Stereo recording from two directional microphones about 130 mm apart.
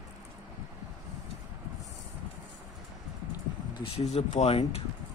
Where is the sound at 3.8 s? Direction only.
50° left (ahead or behind).